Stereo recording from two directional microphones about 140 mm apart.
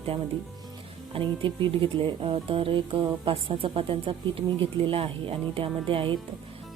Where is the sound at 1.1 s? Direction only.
35° right (ahead or behind).